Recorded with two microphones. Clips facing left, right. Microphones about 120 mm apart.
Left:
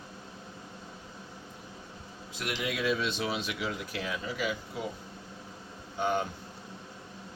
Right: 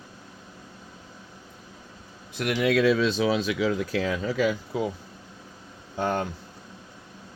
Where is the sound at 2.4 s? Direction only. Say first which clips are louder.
Right 11 dB; 75° right (ahead or behind).